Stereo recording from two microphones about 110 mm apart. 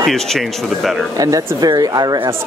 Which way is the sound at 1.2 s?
35° right (ahead or behind).